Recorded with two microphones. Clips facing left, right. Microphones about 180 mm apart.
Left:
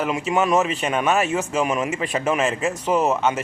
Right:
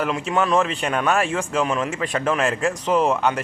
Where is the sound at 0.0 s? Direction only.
5° left (ahead or behind).